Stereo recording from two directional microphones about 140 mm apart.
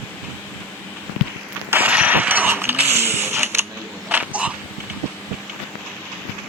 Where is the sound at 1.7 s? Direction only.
10° right (ahead or behind).